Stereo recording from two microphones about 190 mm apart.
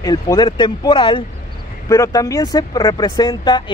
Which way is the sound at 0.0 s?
20° left (ahead or behind).